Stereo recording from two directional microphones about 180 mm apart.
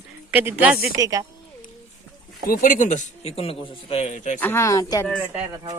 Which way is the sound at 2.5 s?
50° left (ahead or behind).